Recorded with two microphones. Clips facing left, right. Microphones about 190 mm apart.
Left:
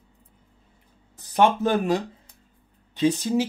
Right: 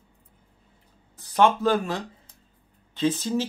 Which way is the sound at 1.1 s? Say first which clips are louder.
Left 1 dB; 20° left (ahead or behind).